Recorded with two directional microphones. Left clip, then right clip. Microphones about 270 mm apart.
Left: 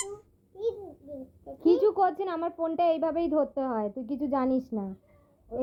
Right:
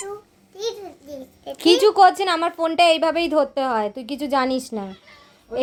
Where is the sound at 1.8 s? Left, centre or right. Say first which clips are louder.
Right 11 dB; centre.